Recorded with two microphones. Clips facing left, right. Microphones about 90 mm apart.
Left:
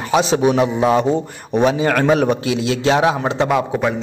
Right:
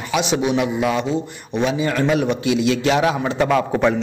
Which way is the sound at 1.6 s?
55° left (ahead or behind).